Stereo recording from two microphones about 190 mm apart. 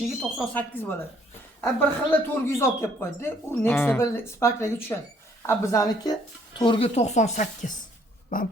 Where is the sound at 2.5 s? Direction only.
15° left (ahead or behind).